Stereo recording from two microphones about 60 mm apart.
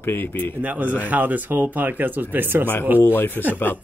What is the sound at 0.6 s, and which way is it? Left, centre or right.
Speech, right.